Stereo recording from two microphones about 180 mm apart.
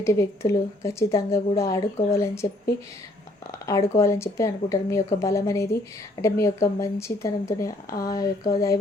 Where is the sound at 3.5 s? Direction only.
15° left (ahead or behind).